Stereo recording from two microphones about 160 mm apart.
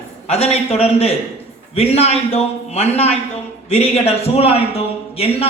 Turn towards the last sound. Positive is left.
turn(degrees=40)  # may be behind; listen again after turning